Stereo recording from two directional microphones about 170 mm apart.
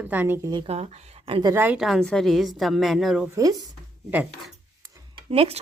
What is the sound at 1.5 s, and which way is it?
Speech, 10° right (ahead or behind).